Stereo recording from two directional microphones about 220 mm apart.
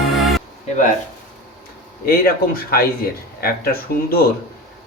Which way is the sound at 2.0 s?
45° left (ahead or behind).